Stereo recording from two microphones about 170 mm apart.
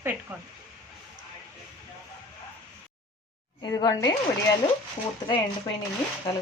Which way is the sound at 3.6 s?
25° left (ahead or behind).